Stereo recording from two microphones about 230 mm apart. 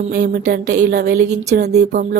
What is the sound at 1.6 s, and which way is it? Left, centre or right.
Speech, right.